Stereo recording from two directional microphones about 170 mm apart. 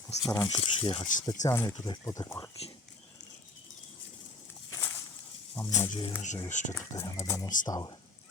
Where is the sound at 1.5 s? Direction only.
20° left (ahead or behind).